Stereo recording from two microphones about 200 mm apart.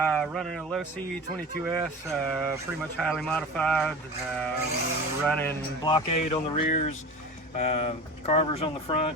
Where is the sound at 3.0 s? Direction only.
Centre (ahead or behind).